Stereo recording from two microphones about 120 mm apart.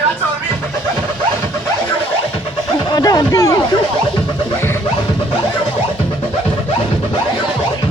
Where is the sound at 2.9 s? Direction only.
30° left (ahead or behind).